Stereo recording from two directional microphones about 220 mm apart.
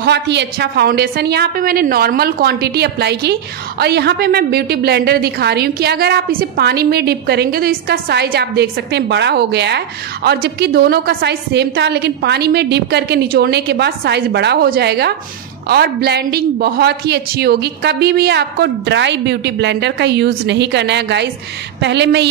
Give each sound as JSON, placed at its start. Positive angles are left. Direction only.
{"t": 0.0, "sound": "a woman's voice", "side_deg": -50}